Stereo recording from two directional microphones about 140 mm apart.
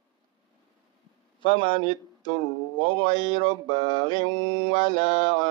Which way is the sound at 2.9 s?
30° left (ahead or behind).